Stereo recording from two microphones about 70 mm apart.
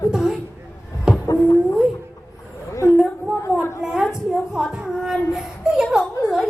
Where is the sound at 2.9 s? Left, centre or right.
Centre.